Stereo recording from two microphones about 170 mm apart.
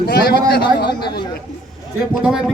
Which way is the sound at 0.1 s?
65° left (ahead or behind).